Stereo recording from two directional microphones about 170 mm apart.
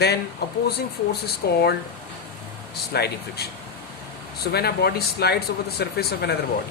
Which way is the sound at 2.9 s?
70° left (ahead or behind).